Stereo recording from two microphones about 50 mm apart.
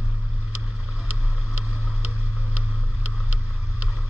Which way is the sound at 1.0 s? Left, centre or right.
Right.